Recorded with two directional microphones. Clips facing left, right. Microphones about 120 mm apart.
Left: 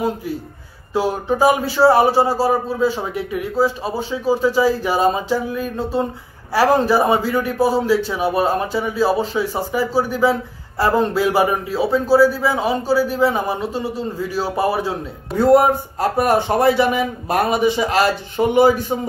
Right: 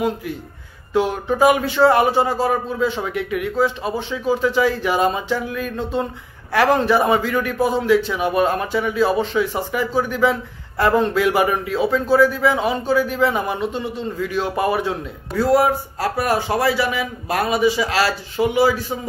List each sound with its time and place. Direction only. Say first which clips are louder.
1.4 s speech: even; 35° left (ahead or behind)
15.4 s speech: left 4 dB; 55° left (ahead or behind)